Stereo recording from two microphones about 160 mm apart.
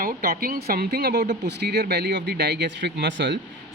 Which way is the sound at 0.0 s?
65° right (ahead or behind).